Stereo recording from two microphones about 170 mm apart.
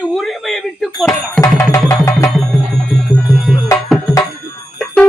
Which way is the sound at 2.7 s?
Centre (ahead or behind).